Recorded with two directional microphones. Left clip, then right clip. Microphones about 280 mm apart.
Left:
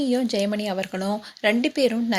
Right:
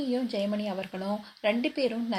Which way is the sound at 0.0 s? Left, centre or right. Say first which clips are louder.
Left 7 dB; left.